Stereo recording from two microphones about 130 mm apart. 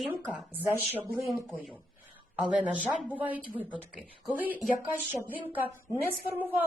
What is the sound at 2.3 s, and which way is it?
A woman's voice, 10° right (ahead or behind).